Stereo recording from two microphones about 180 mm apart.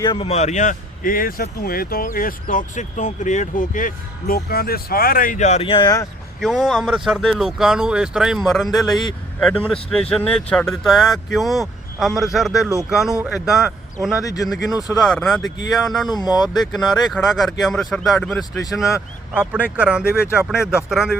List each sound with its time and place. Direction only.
0.0 s speech: 25° left (ahead or behind)
0.3 s speech: 40° left (ahead or behind); by 6.1 s 20° left (ahead or behind)
6.4 s speech: centre (ahead or behind)
15.4 s speech: 90° left
15.9 s speech: centre (ahead or behind)
16.2 s speech: 20° left (ahead or behind)
17.1 s speech: centre (ahead or behind)